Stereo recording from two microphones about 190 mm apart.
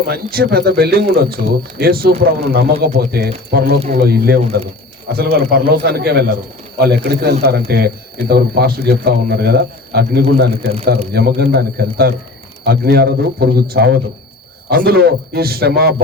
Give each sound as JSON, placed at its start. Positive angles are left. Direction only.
{"t": 0.1, "sound": "speech", "side_deg": -55}